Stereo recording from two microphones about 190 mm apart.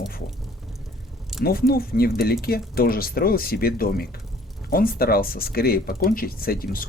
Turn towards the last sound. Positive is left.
turn(degrees=50)  # may be behind; listen again after turning